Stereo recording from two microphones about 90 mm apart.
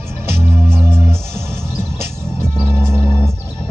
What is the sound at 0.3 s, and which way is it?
Music, 25° right (ahead or behind).